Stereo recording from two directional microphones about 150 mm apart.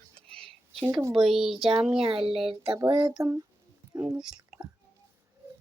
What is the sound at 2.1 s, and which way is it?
Speech, 35° right (ahead or behind).